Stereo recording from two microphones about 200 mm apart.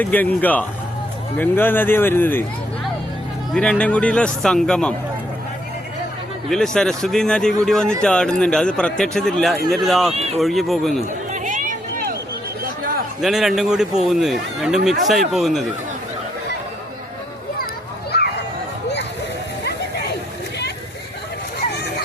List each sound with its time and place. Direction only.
0.0 s speech: 10° left (ahead or behind)
3.5 s a man's voice: 5° left (ahead or behind)
6.5 s a man's voice: centre (ahead or behind)
10.1 s speech: 30° right (ahead or behind)
10.4 s a man's voice: centre (ahead or behind)
11.3 s a sound: 40° right (ahead or behind)
13.2 s a man's voice: centre (ahead or behind)
18.1 s a sound: 55° left (ahead or behind)